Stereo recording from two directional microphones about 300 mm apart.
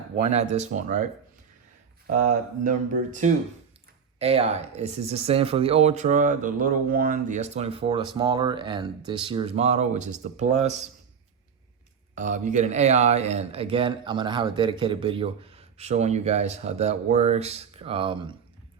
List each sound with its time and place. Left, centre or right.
0.3 s speech: right
2.0 s speech: right
12.1 s speech: right